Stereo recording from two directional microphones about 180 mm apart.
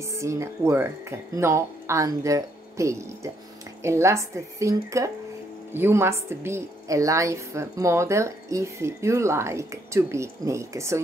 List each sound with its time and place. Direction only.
0.0 s a woman's voice: 15° right (ahead or behind)